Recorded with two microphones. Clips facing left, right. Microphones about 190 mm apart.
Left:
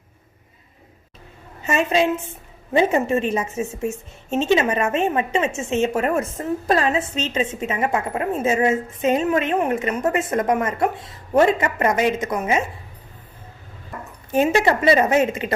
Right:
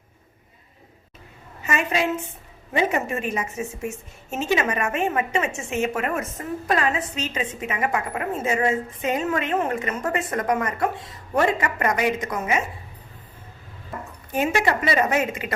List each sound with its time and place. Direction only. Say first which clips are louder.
1.6 s a woman's voice: left 5 dB; 25° left (ahead or behind)
14.3 s a woman's voice: left 5 dB; 25° left (ahead or behind)